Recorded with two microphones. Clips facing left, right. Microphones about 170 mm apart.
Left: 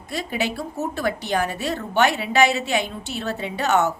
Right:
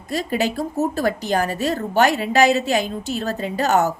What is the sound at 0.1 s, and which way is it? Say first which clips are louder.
A woman's voice: right 4 dB; 40° right (ahead or behind).